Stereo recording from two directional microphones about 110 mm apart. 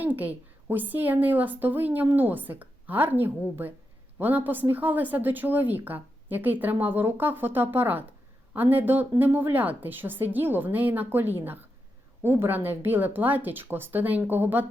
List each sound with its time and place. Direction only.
0.0 s a woman's voice: 15° right (ahead or behind)